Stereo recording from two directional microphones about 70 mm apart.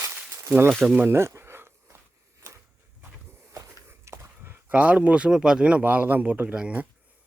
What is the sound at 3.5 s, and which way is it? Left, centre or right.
Walk, right.